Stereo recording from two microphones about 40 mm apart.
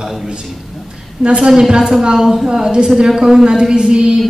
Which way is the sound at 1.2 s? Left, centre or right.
Right.